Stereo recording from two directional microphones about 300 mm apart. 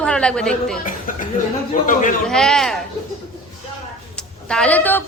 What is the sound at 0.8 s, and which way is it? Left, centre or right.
Speech, left.